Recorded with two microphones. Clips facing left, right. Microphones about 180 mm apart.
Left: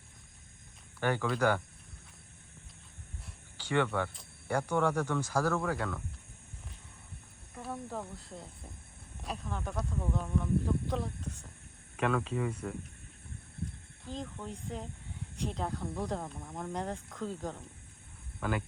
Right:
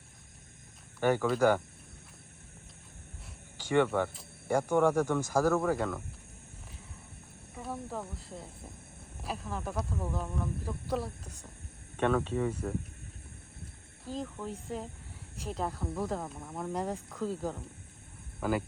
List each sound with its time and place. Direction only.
1.0 s speech: 10° right (ahead or behind)
3.6 s speech: 10° right (ahead or behind)
7.5 s speech: centre (ahead or behind)
14.0 s speech: 5° right (ahead or behind)